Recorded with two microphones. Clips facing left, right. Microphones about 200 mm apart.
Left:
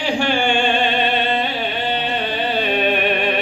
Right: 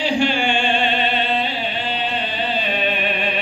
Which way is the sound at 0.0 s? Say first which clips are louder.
Even; 50° left (ahead or behind).